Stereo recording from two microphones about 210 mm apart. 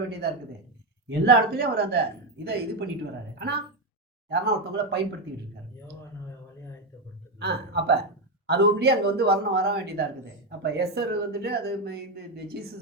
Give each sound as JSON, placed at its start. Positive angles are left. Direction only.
{"t": 1.2, "sound": "a woman's voice", "side_deg": -50}
{"t": 7.3, "sound": "a man's voice", "side_deg": -50}